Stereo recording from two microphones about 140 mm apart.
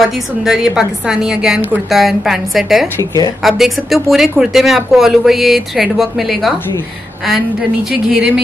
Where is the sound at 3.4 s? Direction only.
Centre (ahead or behind).